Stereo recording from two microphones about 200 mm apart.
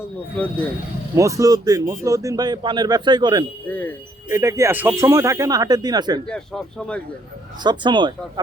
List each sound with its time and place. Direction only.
0.0 s speech: 10° left (ahead or behind)
1.1 s speech: 15° right (ahead or behind)
3.7 s speech: 10° left (ahead or behind)
4.3 s speech: 15° right (ahead or behind)
6.2 s speech: 5° left (ahead or behind)
7.6 s speech: 20° right (ahead or behind)